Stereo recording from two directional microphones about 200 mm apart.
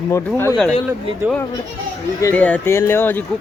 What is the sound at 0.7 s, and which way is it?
Speech, 25° left (ahead or behind).